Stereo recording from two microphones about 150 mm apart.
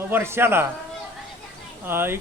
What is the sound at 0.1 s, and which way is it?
Speech, 15° right (ahead or behind).